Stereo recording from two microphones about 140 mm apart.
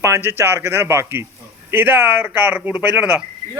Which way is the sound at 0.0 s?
15° right (ahead or behind).